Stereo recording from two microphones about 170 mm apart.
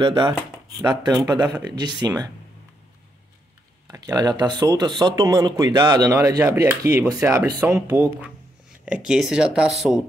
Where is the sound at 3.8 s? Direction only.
20° right (ahead or behind).